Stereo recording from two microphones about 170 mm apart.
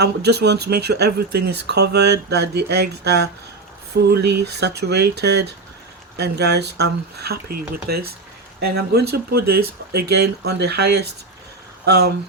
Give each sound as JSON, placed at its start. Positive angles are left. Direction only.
{"t": 0.0, "sound": "speech", "side_deg": -75}
{"t": 8.6, "sound": "speech", "side_deg": -70}